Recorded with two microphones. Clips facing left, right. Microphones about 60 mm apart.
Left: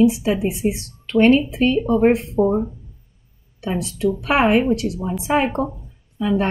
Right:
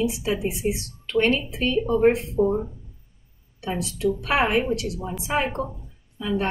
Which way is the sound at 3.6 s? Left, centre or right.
Left.